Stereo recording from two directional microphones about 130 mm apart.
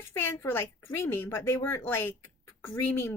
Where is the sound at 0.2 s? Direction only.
20° left (ahead or behind).